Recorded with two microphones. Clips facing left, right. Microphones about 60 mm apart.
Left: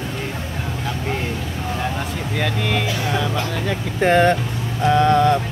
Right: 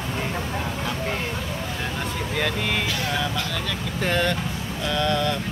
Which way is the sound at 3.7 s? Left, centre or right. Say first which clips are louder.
Left 11 dB; left.